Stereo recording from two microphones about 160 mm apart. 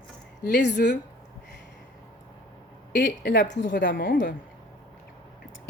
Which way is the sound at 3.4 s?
50° left (ahead or behind).